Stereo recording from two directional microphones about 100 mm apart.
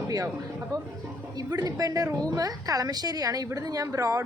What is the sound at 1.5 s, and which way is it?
A woman's voice, 35° right (ahead or behind).